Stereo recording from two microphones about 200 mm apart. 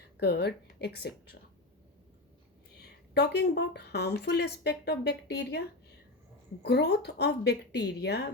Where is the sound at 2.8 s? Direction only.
55° left (ahead or behind).